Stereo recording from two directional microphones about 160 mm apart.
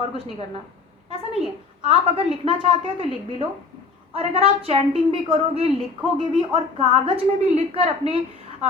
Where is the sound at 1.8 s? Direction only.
35° right (ahead or behind).